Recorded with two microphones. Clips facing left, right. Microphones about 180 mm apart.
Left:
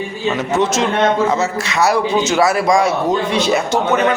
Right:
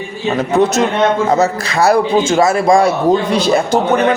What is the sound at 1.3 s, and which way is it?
A man's voice, 35° right (ahead or behind).